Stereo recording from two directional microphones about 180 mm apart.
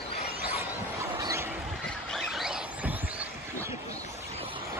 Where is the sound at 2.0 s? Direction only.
Centre (ahead or behind).